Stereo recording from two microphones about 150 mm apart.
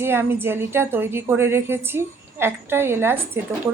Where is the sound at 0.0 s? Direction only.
15° right (ahead or behind).